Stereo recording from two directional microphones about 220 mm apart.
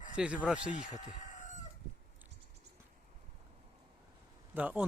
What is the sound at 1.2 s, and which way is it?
Chicken, 35° left (ahead or behind).